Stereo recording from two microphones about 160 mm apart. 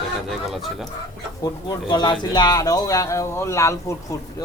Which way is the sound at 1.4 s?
25° left (ahead or behind).